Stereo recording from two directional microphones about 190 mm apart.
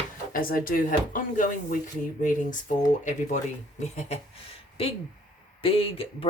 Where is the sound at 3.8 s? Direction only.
35° left (ahead or behind).